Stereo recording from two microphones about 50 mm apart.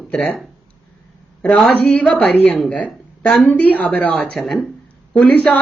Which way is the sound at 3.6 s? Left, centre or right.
Left.